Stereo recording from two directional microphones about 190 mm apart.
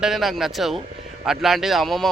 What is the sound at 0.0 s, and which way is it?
Speech, centre (ahead or behind).